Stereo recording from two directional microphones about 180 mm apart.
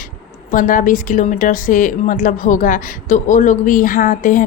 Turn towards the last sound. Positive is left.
turn(degrees=50)  # may be behind; listen again after turning